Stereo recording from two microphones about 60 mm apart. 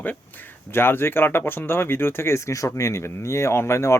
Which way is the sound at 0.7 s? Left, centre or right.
Left.